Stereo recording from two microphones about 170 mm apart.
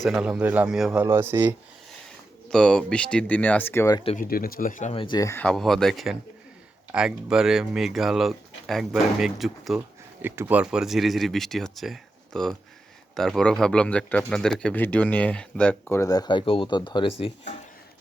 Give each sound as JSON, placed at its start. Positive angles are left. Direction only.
{"t": 0.0, "sound": "speech", "side_deg": -5}
{"t": 1.0, "sound": "speech", "side_deg": -15}
{"t": 2.5, "sound": "a man's voice", "side_deg": 5}
{"t": 3.9, "sound": "speech", "side_deg": 35}
{"t": 4.2, "sound": "speech", "side_deg": 60}
{"t": 4.9, "sound": "speech", "side_deg": 25}
{"t": 5.5, "sound": "a man's voice", "side_deg": 0}